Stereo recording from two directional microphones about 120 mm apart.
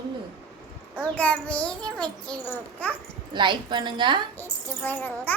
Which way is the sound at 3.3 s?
40° right (ahead or behind).